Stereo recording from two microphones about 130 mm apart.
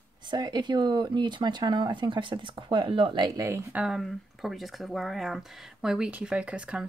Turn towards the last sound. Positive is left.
turn(degrees=-10)  # may be behind; listen again after turning